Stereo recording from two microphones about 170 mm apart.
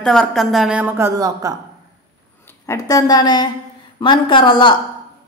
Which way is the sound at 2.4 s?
20° left (ahead or behind).